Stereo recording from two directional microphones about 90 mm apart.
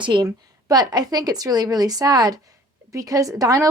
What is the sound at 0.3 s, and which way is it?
A woman's voice, 45° right (ahead or behind).